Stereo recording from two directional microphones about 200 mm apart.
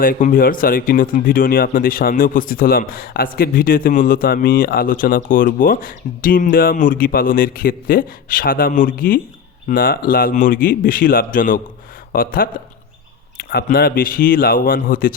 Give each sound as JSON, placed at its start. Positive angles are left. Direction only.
{"t": 0.0, "sound": "speech", "side_deg": 45}